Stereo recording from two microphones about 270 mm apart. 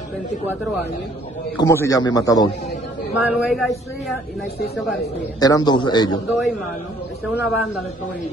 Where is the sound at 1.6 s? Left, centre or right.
Centre.